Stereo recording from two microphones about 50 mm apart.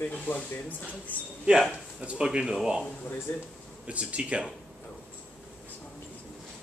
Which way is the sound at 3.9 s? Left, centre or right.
Right.